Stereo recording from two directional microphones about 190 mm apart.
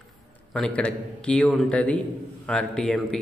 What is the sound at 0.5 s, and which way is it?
A man's voice, 5° left (ahead or behind).